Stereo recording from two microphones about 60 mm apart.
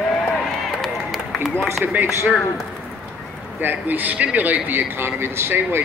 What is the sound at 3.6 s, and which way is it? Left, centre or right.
A man's voice, right.